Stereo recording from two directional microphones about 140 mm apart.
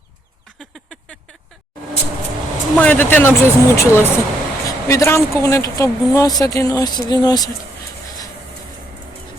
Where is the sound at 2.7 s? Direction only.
10° left (ahead or behind); by 7.5 s 30° left (ahead or behind).